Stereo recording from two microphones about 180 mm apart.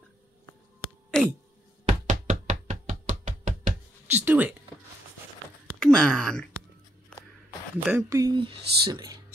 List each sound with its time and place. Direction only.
1.1 s a sound: 5° left (ahead or behind)
1.9 s chopping: 45° right (ahead or behind)
4.1 s speech: 10° right (ahead or behind)
5.8 s speech: 5° left (ahead or behind)
7.8 s speech: 15° right (ahead or behind)